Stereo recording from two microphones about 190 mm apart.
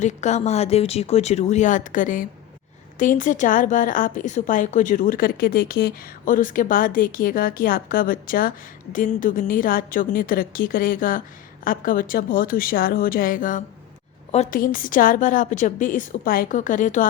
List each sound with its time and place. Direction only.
0.0 s a woman's voice: 40° left (ahead or behind)